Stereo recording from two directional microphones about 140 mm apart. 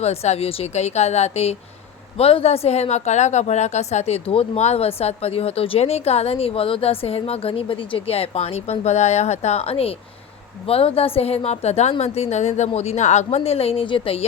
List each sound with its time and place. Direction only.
0.0 s a woman's voice: 50° left (ahead or behind)